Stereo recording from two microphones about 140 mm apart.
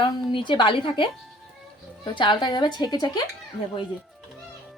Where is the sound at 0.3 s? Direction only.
35° left (ahead or behind).